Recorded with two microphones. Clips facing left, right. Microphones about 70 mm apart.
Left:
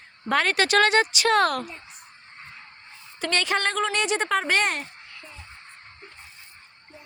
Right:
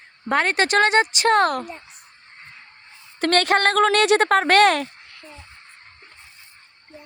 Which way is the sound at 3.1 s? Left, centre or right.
Right.